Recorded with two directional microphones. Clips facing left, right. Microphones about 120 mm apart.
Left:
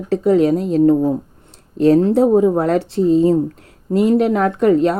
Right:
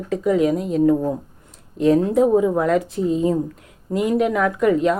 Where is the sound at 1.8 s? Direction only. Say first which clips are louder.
Left 4 dB; 35° left (ahead or behind).